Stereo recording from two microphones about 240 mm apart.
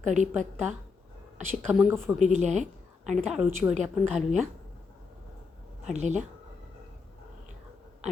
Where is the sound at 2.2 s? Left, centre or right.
Right.